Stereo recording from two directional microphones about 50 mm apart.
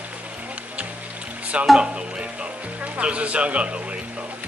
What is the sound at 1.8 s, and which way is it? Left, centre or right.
Speech, centre.